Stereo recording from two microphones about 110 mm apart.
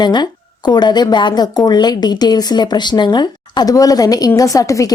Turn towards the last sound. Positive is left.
turn(degrees=30)  # may be behind; listen again after turning